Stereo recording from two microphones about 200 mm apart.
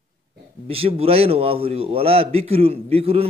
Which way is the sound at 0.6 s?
30° right (ahead or behind).